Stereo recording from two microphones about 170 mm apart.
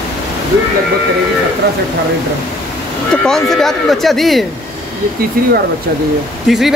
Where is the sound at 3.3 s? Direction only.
Centre (ahead or behind).